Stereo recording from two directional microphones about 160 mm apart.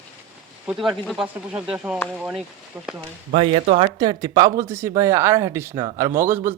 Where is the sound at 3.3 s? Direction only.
45° right (ahead or behind).